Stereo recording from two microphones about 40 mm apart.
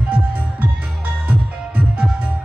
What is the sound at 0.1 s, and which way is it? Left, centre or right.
Music, right.